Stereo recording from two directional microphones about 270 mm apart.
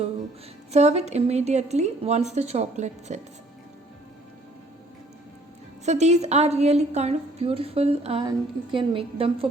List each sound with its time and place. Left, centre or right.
0.7 s a woman's voice: right
5.8 s a woman's voice: right